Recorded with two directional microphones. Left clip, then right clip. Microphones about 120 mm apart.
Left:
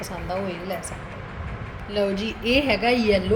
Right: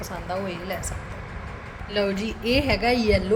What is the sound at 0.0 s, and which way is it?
Speech, 10° left (ahead or behind).